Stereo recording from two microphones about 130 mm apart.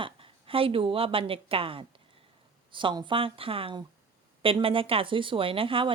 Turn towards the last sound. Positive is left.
turn(degrees=-45)  # may be behind; listen again after turning